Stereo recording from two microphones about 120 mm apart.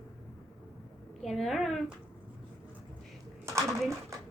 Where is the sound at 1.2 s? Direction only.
Centre (ahead or behind).